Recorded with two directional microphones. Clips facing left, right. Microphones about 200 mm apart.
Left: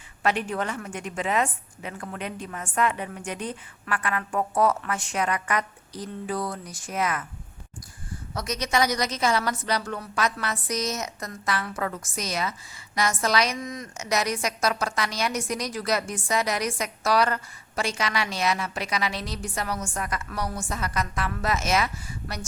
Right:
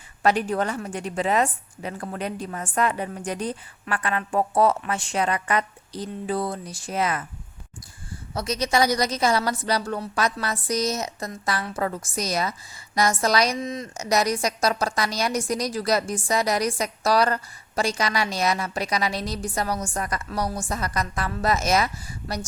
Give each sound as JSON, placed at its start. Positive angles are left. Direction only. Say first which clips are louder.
{"t": 0.2, "sound": "a woman's voice", "louder": "right 4 dB", "side_deg": -40}
{"t": 8.3, "sound": "a woman's voice", "louder": "right 3 dB", "side_deg": -30}
{"t": 13.6, "sound": "a woman's voice", "louder": "right 4 dB", "side_deg": -25}